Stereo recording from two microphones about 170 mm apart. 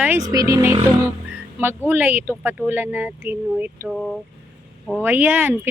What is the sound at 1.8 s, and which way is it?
Speech, 10° right (ahead or behind).